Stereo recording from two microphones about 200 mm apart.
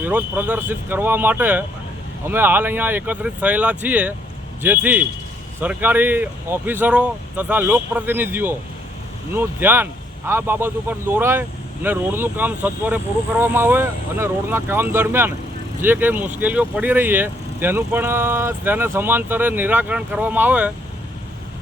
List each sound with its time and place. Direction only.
0.0 s a man's voice: 10° right (ahead or behind)